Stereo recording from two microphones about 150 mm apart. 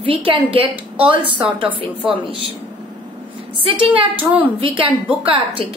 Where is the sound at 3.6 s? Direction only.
35° right (ahead or behind).